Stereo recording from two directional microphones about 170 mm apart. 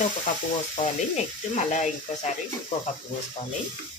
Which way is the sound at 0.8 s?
45° left (ahead or behind).